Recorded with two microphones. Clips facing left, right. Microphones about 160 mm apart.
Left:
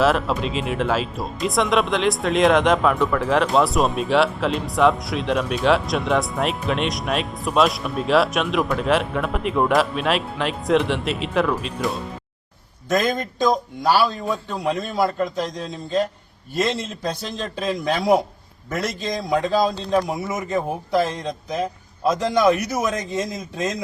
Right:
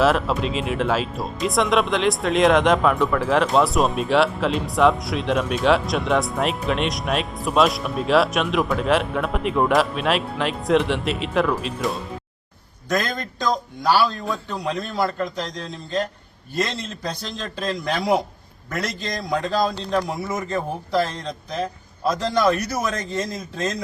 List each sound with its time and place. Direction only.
0.0 s speech: centre (ahead or behind)
13.0 s a man's voice: 5° left (ahead or behind)
20.1 s a man's voice: 15° left (ahead or behind)